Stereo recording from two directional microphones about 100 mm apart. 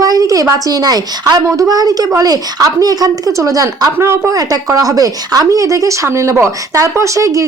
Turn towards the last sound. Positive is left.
turn(degrees=-30)  # may be behind; listen again after turning